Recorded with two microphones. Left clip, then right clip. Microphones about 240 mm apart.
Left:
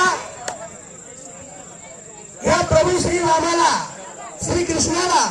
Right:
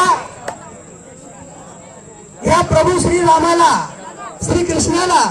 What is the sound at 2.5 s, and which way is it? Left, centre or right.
A man's voice, right.